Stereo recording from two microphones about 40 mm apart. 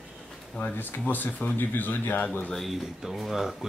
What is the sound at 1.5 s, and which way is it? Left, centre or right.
Speech, left.